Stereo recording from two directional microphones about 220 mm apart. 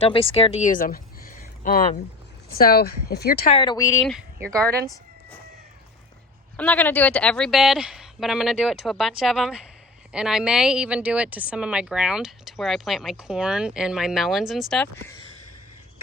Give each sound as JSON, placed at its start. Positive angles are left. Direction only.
{"t": 0.0, "sound": "speech", "side_deg": 25}
{"t": 3.5, "sound": "speech", "side_deg": 20}
{"t": 4.4, "sound": "speech", "side_deg": -15}
{"t": 6.6, "sound": "speech", "side_deg": 5}